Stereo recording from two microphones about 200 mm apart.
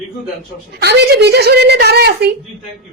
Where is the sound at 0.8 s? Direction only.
55° right (ahead or behind).